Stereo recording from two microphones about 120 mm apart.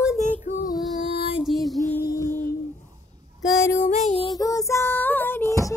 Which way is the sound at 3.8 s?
75° left (ahead or behind).